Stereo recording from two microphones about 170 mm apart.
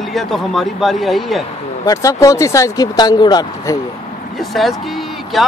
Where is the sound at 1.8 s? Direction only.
20° left (ahead or behind).